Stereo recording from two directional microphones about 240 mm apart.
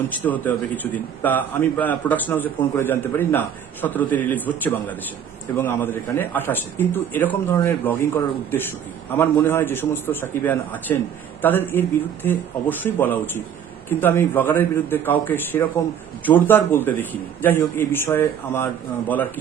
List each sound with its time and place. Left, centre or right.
0.3 s a man's voice: centre
9.1 s a man's voice: centre